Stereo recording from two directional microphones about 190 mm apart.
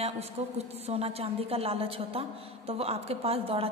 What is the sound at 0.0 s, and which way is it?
A woman's voice, 35° right (ahead or behind).